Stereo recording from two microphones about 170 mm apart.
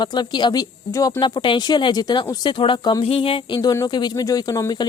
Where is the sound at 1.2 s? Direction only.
30° left (ahead or behind).